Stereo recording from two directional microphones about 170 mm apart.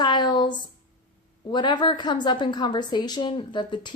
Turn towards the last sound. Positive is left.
turn(degrees=25)  # may be behind; listen again after turning